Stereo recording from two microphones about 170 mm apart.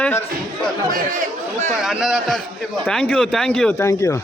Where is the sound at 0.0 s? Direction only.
10° left (ahead or behind).